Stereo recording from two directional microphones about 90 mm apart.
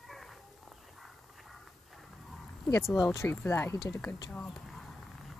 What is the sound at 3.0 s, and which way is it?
Speech, 35° left (ahead or behind).